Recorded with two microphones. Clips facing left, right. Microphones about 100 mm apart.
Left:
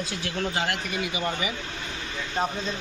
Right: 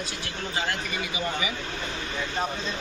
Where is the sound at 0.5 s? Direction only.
70° left (ahead or behind).